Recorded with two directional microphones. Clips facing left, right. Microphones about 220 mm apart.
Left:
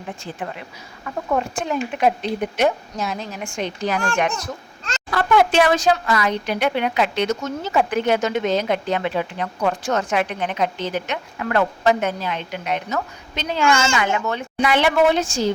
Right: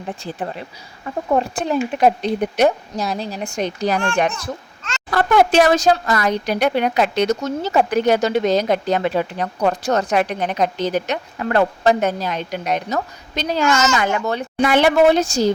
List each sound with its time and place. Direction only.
0.2 s speech: 35° right (ahead or behind)